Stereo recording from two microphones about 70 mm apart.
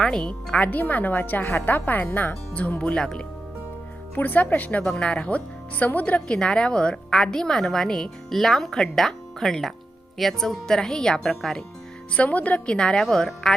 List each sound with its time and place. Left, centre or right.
0.0 s speech: centre
4.1 s speech: left
4.8 s speech: centre
12.1 s speech: centre